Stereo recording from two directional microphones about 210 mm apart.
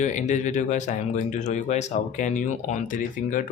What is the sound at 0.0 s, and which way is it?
Speech, 35° left (ahead or behind).